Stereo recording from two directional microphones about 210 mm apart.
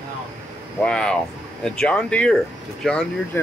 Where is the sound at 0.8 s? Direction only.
5° left (ahead or behind).